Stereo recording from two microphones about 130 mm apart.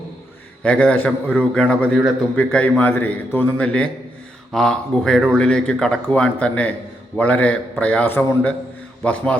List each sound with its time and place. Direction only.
0.6 s speech: 10° left (ahead or behind)